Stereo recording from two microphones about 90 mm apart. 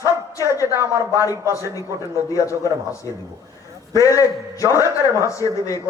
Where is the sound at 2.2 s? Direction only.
40° left (ahead or behind).